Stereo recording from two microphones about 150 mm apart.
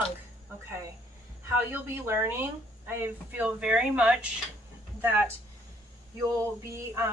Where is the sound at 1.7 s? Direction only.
15° right (ahead or behind).